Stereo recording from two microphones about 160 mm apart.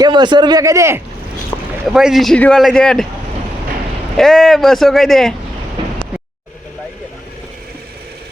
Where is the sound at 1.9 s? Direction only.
Centre (ahead or behind).